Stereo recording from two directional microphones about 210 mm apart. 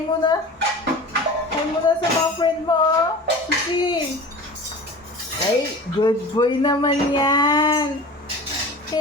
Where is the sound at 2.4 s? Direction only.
20° left (ahead or behind).